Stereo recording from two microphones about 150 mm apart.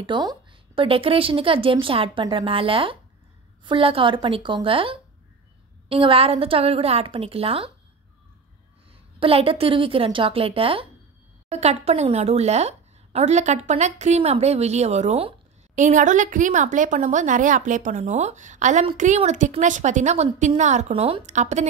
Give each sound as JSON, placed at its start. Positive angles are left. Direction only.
{"t": 0.0, "sound": "a woman's voice", "side_deg": -30}
{"t": 9.2, "sound": "a woman's voice", "side_deg": -40}
{"t": 21.3, "sound": "a woman's voice", "side_deg": -50}